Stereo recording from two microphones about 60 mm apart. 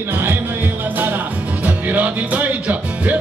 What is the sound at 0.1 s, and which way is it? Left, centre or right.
Music, right.